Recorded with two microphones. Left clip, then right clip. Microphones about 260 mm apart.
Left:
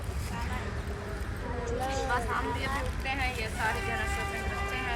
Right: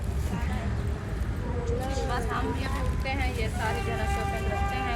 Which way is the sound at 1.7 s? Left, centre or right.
Centre.